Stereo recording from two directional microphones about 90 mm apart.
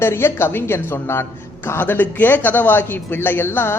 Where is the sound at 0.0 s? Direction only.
25° left (ahead or behind).